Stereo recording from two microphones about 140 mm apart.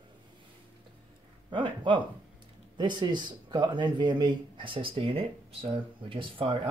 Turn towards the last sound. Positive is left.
turn(degrees=-40)  # may be behind; listen again after turning